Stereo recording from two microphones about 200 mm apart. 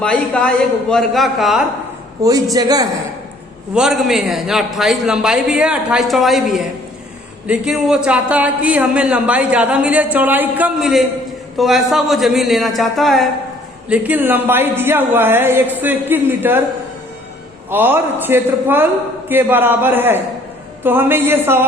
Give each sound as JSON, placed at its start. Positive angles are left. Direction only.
{"t": 0.0, "sound": "a man's voice", "side_deg": 5}
{"t": 2.2, "sound": "a woman's voice", "side_deg": -15}
{"t": 3.8, "sound": "a man's voice", "side_deg": 0}
{"t": 17.7, "sound": "a woman's voice", "side_deg": -10}